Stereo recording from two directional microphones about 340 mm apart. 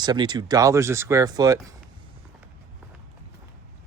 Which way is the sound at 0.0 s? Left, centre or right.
Centre.